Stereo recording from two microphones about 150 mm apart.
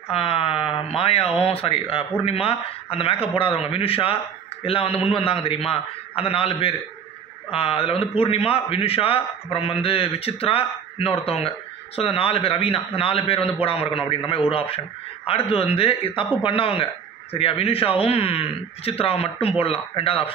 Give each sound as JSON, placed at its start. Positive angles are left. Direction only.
{"t": 0.1, "sound": "a man's voice", "side_deg": 40}